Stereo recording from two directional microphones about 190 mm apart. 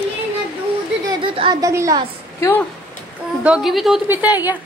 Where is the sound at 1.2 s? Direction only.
25° right (ahead or behind).